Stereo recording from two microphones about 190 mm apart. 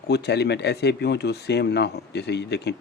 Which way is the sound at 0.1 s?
60° left (ahead or behind).